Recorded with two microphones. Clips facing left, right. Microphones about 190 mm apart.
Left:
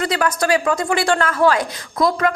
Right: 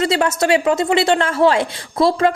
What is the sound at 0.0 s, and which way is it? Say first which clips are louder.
Speech: right 3 dB; 25° right (ahead or behind).